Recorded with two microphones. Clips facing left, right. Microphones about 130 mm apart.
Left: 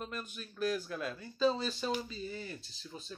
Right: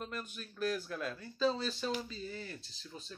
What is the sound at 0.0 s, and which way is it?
Speech, 5° left (ahead or behind).